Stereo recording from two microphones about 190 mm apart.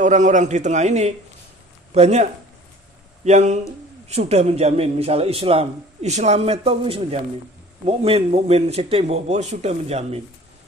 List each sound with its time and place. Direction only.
0.0 s a man's voice: 40° right (ahead or behind)
3.3 s a man's voice: 40° right (ahead or behind)